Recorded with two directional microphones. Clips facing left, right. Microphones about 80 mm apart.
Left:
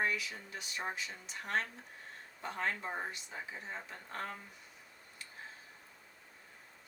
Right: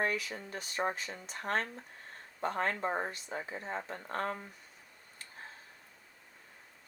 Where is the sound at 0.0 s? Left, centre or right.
Right.